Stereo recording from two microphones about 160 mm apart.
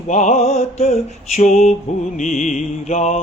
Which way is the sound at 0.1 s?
45° left (ahead or behind).